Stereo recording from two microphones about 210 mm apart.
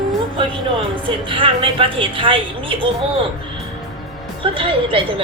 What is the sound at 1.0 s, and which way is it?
Speech, 25° right (ahead or behind).